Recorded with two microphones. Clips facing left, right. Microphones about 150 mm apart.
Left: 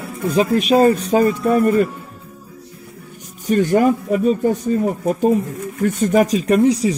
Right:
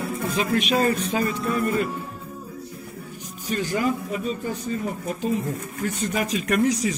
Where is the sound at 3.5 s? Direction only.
55° left (ahead or behind).